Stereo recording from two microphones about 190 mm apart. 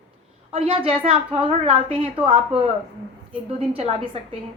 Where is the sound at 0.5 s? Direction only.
30° right (ahead or behind).